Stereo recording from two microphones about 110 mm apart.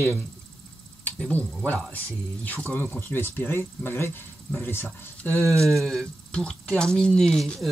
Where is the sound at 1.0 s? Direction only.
15° left (ahead or behind).